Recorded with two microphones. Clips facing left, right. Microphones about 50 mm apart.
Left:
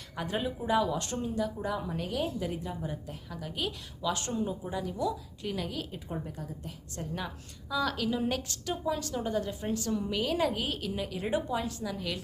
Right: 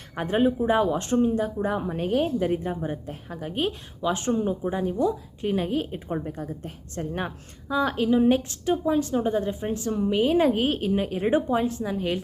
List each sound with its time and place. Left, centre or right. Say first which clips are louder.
0.2 s speech: right 10 dB; right